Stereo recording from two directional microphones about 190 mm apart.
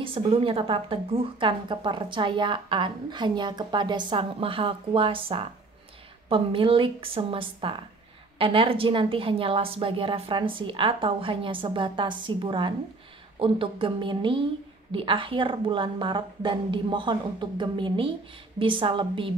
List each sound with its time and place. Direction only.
0.0 s a woman's voice: 30° right (ahead or behind)